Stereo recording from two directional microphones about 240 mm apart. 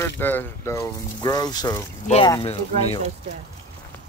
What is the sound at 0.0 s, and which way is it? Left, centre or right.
Speech, centre.